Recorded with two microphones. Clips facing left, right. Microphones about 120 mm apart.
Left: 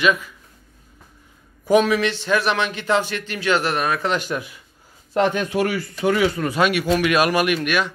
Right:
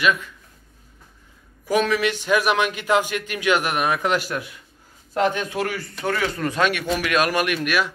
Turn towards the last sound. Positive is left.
turn(degrees=0)  # may be behind; listen again after turning